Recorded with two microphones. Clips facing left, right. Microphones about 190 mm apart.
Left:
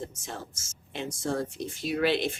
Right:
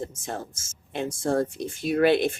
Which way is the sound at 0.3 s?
50° right (ahead or behind).